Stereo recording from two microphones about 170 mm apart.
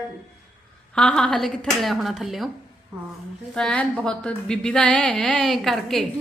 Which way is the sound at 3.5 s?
5° left (ahead or behind).